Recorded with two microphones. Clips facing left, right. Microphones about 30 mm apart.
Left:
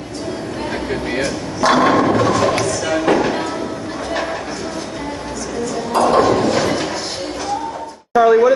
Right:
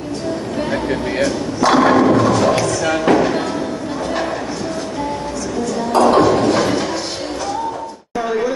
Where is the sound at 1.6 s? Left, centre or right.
Centre.